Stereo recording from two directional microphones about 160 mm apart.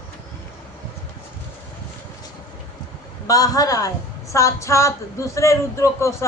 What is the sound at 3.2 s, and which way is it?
A woman's voice, 20° left (ahead or behind).